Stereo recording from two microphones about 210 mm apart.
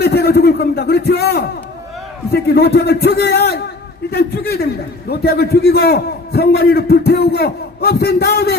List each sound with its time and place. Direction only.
0.0 s a man's voice: 50° left (ahead or behind)